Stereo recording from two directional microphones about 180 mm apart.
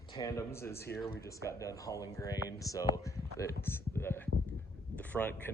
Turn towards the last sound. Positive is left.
turn(degrees=10)  # may be behind; listen again after turning